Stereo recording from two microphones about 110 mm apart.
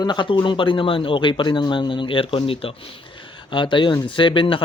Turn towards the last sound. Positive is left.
turn(degrees=50)  # may be behind; listen again after turning